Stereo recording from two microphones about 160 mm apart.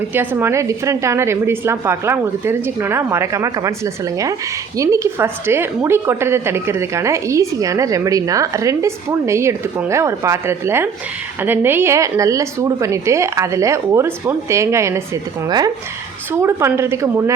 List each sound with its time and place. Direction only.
0.1 s a woman's voice: 15° right (ahead or behind)